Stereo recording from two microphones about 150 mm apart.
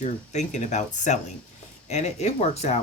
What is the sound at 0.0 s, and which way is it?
Speech, 50° left (ahead or behind).